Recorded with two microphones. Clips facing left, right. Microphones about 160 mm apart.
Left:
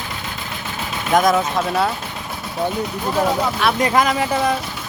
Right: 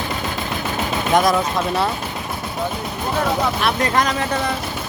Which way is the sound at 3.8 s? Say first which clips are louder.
Left 3 dB; 5° left (ahead or behind).